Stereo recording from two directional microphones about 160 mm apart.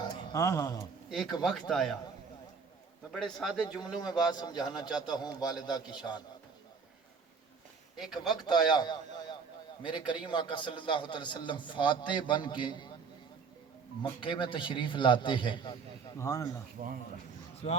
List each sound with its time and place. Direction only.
0.0 s a sound: 25° left (ahead or behind)
1.1 s speech: centre (ahead or behind)
3.1 s speech: 5° left (ahead or behind)
4.3 s a man's voice: 25° left (ahead or behind)
7.9 s speech: centre (ahead or behind)
8.3 s a man's voice: 25° left (ahead or behind)
14.0 s a man's voice: 30° left (ahead or behind)
16.1 s speech: 15° left (ahead or behind)
16.8 s speech: 60° right (ahead or behind)